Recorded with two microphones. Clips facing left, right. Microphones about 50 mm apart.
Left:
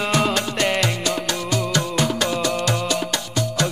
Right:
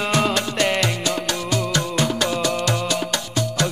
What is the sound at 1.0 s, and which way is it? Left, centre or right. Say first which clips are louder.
Music: even; right.